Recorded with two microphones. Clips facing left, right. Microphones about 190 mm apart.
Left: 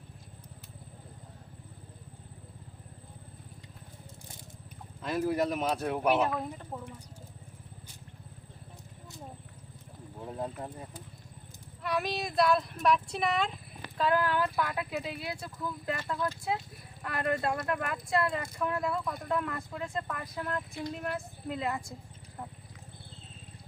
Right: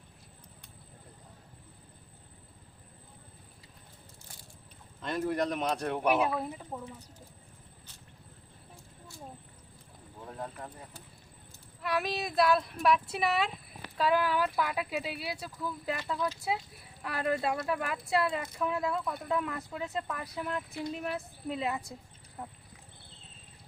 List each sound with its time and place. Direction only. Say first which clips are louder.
5.0 s speech: left 2 dB; 5° left (ahead or behind)
6.1 s speech: even; 10° right (ahead or behind)
10.2 s speech: left 4 dB; 20° left (ahead or behind)
11.8 s speech: even; centre (ahead or behind)
22.4 s wild animals: even; 5° right (ahead or behind)